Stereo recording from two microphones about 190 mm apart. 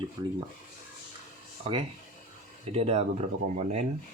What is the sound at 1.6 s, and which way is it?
Speech, 30° right (ahead or behind).